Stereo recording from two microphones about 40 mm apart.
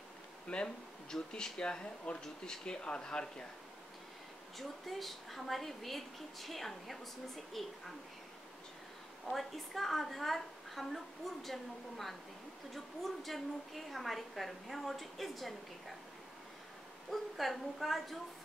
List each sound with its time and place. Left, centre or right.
0.5 s speech: left
4.6 s a woman's voice: centre
9.2 s a woman's voice: centre
17.1 s a woman's voice: centre